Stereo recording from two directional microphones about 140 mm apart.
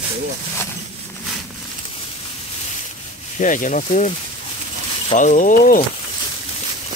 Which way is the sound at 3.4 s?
65° left (ahead or behind).